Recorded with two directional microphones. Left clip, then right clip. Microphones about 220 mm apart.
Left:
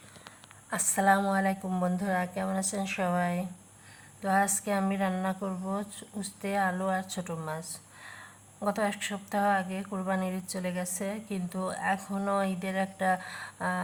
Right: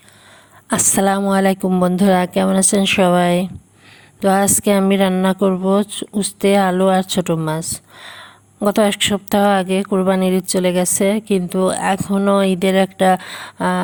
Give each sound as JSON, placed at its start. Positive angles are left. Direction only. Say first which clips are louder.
{"t": 0.7, "sound": "a woman's voice", "louder": "right 9 dB", "side_deg": -40}